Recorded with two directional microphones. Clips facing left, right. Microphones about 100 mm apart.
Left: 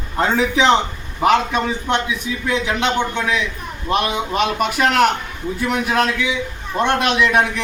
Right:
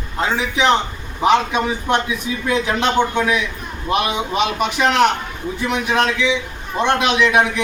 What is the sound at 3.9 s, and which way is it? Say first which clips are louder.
A man's voice: even; centre (ahead or behind).